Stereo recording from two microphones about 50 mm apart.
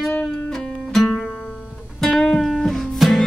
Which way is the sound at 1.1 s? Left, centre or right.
Left.